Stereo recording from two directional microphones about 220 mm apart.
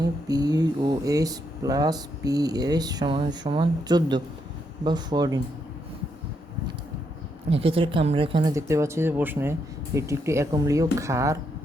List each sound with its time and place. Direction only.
0.3 s speech: 15° right (ahead or behind)
7.5 s speech: 25° right (ahead or behind)